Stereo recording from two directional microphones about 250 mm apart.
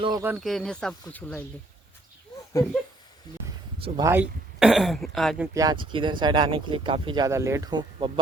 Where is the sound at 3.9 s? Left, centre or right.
Centre.